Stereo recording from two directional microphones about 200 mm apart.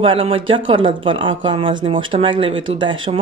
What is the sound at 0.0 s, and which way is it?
Speech, 25° right (ahead or behind).